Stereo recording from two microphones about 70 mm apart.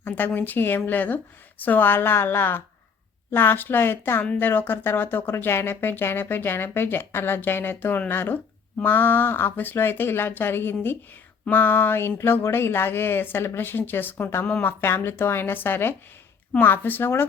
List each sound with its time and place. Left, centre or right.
0.3 s speech: left